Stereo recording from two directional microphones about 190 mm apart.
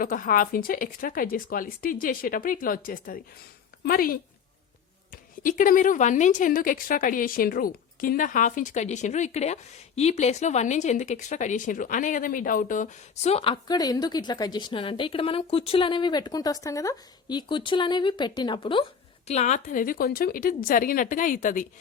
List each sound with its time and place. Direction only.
0.0 s a woman's voice: 45° left (ahead or behind); by 18.9 s 25° left (ahead or behind)
19.3 s speech: 35° left (ahead or behind)